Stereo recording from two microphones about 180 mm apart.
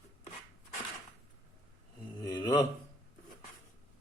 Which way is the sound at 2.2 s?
20° left (ahead or behind).